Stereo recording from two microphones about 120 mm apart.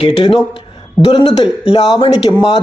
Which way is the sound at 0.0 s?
50° left (ahead or behind).